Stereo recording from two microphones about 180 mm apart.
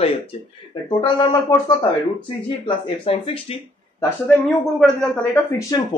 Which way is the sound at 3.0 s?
30° left (ahead or behind).